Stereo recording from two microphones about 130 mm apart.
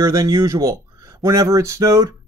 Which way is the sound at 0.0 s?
25° right (ahead or behind).